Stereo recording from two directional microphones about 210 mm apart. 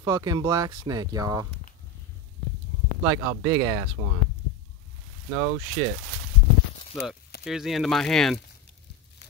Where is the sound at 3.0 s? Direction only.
15° right (ahead or behind).